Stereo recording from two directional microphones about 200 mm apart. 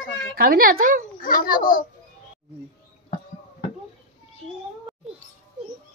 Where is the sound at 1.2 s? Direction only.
45° left (ahead or behind).